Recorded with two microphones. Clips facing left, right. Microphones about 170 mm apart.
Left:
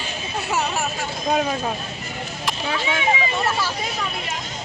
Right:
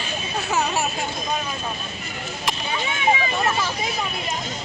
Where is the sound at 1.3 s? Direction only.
85° left.